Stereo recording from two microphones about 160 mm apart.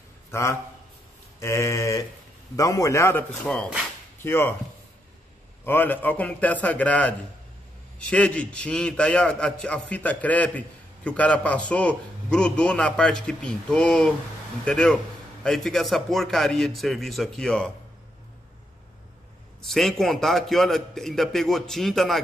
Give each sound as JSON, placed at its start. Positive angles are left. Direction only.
{"t": 0.3, "sound": "a man's voice", "side_deg": 15}
{"t": 1.4, "sound": "a sound", "side_deg": 15}
{"t": 2.5, "sound": "a man's voice", "side_deg": 20}
{"t": 5.7, "sound": "a man's voice", "side_deg": 10}
{"t": 19.6, "sound": "a man's voice", "side_deg": 0}